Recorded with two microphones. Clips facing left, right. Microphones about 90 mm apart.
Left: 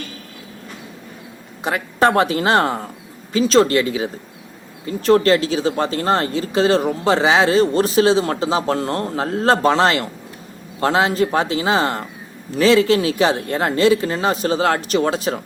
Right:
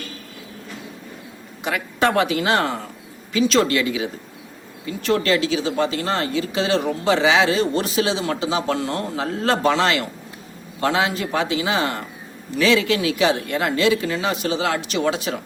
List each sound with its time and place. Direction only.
1.6 s speech: 35° left (ahead or behind)